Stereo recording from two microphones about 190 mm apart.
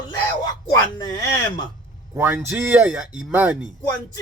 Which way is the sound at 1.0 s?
20° left (ahead or behind).